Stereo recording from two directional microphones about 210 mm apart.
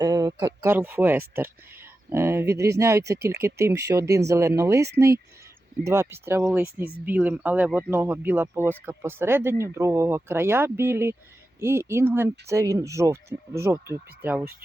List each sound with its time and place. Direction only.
0.0 s speech: 20° right (ahead or behind)